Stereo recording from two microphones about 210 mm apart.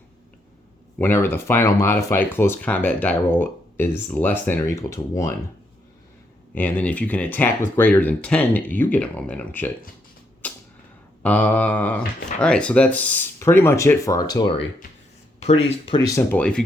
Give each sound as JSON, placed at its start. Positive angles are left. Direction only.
{"t": 0.9, "sound": "speech", "side_deg": 10}
{"t": 6.5, "sound": "speech", "side_deg": 5}
{"t": 10.4, "sound": "a sound", "side_deg": 5}
{"t": 11.2, "sound": "speech", "side_deg": 5}
{"t": 15.4, "sound": "speech", "side_deg": 30}
{"t": 16.0, "sound": "speech", "side_deg": 10}